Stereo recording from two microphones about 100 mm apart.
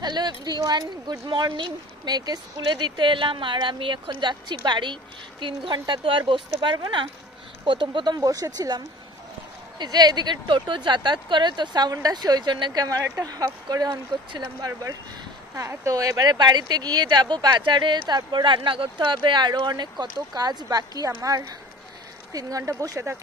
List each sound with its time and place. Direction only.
0.0 s speech: 45° right (ahead or behind); by 23.1 s 30° right (ahead or behind)